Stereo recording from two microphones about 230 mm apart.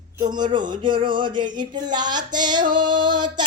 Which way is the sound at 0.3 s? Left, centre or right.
Centre.